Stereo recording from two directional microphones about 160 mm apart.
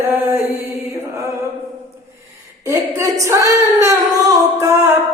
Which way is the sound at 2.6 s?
20° right (ahead or behind).